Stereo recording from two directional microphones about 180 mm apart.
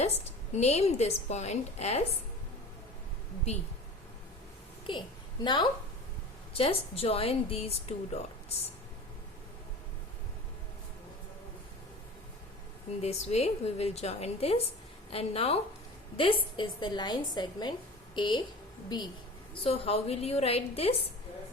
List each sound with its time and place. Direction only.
0.0 s a woman's voice: 35° left (ahead or behind)
4.9 s a woman's voice: 25° left (ahead or behind)
13.0 s a woman's voice: 35° left (ahead or behind)